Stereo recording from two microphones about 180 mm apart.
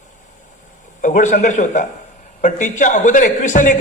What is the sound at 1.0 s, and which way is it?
A man's voice, 45° left (ahead or behind).